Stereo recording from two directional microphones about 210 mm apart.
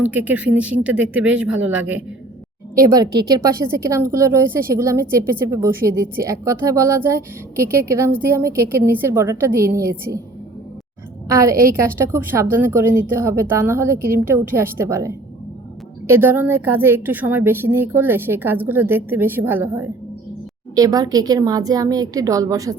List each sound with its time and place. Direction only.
0.0 s a woman's voice: 5° right (ahead or behind)
11.7 s a woman's voice: 10° right (ahead or behind)